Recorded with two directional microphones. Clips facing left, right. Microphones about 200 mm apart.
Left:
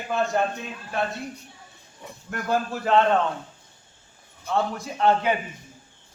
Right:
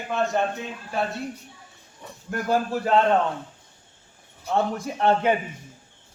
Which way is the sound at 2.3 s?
10° right (ahead or behind).